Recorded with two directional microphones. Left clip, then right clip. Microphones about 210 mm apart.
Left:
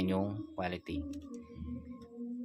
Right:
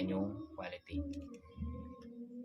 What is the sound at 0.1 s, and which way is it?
Speech, 55° left (ahead or behind).